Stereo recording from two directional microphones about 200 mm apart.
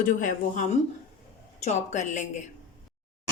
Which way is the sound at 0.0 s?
40° left (ahead or behind).